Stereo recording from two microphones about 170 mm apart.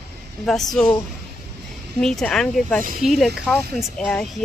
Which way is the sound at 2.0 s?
Centre (ahead or behind).